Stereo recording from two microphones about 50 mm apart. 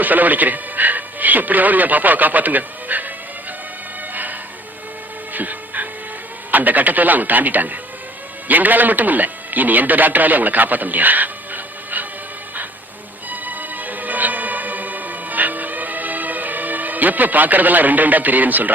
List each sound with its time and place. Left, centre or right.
0.0 s speech: right
4.1 s music: right
5.3 s a sound: right
6.5 s a man's voice: right
13.3 s music: right